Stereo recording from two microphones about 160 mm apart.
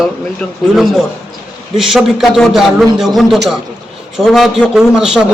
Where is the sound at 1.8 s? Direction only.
Centre (ahead or behind).